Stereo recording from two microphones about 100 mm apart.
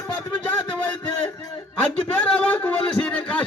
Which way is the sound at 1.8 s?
10° left (ahead or behind).